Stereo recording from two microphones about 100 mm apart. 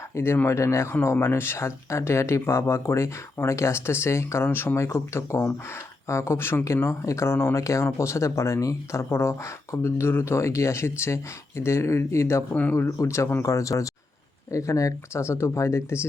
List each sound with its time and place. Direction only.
0.1 s speech: 25° left (ahead or behind)
12.5 s speech: 15° left (ahead or behind)
12.8 s speech: 30° left (ahead or behind)